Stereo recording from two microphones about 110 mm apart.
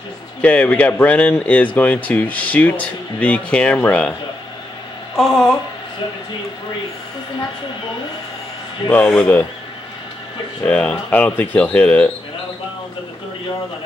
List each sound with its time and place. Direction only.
0.4 s speech: 10° left (ahead or behind)
5.1 s speech: centre (ahead or behind)
8.9 s speech: 10° left (ahead or behind)
10.6 s speech: 10° left (ahead or behind)